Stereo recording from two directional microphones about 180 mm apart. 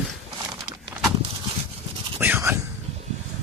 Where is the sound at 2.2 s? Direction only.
10° right (ahead or behind).